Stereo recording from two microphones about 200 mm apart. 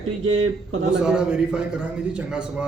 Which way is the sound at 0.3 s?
80° right.